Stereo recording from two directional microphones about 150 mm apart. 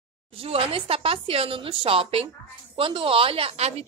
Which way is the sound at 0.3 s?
40° right (ahead or behind).